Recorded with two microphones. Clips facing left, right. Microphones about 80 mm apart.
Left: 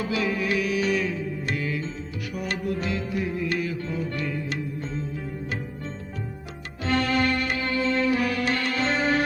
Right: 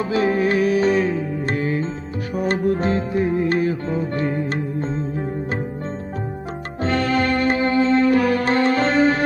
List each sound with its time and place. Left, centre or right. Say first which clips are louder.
0.0 s music: right 7 dB; right
6.8 s music: right 4 dB; right